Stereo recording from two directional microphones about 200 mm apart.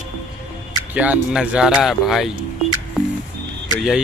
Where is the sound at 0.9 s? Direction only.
5° right (ahead or behind).